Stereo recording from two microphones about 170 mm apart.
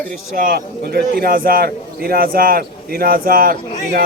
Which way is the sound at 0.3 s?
55° right (ahead or behind).